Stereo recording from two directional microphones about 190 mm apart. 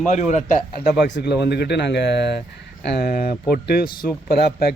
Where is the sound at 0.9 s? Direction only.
65° left (ahead or behind).